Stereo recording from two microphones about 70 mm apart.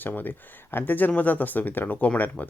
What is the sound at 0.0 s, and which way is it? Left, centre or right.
Speech, left.